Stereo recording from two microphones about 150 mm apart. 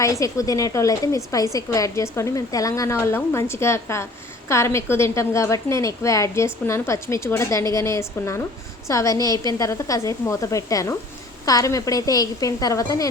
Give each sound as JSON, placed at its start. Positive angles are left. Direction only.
{"t": 0.0, "sound": "a woman's voice", "side_deg": 20}